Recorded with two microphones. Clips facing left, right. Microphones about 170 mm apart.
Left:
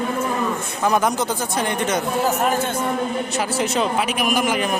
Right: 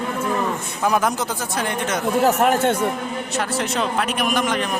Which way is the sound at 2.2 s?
75° right (ahead or behind).